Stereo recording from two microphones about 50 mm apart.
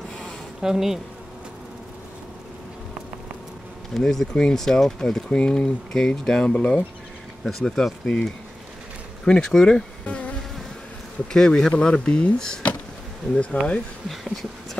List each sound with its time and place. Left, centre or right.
0.6 s speech: centre
3.9 s speech: centre
6.4 s speech: left
7.4 s speech: centre
10.0 s bee: left
11.3 s speech: centre
13.5 s speech: left
14.0 s speech: centre